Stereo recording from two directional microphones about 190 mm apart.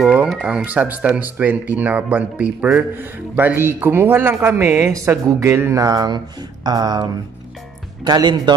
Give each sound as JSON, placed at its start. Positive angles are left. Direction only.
{"t": 0.0, "sound": "speech", "side_deg": -5}